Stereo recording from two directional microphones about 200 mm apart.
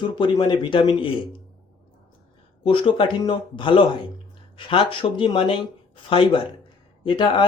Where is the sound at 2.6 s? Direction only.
25° left (ahead or behind).